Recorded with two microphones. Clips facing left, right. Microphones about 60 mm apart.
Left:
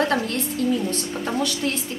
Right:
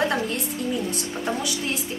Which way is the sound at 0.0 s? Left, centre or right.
Centre.